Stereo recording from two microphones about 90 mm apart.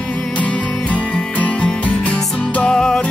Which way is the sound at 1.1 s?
15° left (ahead or behind).